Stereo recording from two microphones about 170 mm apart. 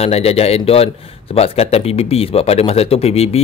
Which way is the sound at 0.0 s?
35° left (ahead or behind).